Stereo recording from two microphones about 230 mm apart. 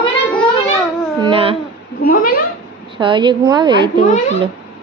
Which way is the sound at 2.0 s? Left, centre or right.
Left.